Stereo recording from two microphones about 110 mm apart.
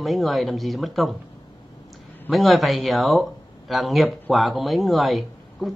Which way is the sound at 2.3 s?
Centre (ahead or behind).